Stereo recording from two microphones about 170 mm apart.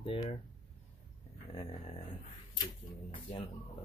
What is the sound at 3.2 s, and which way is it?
Speech, 30° left (ahead or behind).